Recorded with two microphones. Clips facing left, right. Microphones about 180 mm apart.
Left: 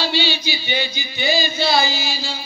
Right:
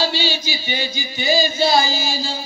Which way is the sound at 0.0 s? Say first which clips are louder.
Even; 45° right (ahead or behind).